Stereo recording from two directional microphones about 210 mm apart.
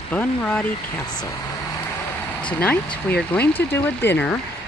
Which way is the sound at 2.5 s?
10° left (ahead or behind).